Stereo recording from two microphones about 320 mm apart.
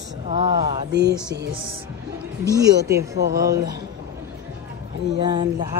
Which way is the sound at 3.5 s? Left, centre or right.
Centre.